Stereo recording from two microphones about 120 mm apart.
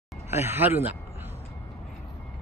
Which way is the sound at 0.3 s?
20° right (ahead or behind).